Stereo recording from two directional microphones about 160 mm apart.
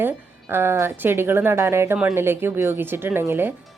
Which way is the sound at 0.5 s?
15° right (ahead or behind).